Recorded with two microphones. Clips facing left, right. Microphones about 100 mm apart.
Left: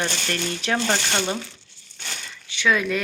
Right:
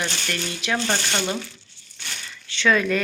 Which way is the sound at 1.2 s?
20° left (ahead or behind).